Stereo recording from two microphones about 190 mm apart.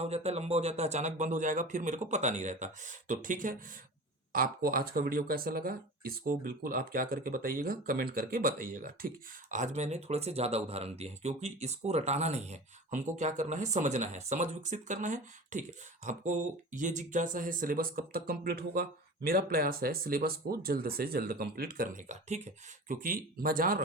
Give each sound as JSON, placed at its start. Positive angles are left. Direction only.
{"t": 0.0, "sound": "speech", "side_deg": -35}